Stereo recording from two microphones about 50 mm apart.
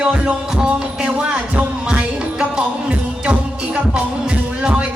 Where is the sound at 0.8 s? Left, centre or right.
Centre.